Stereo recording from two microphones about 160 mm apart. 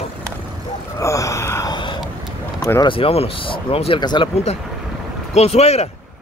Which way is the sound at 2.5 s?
15° left (ahead or behind).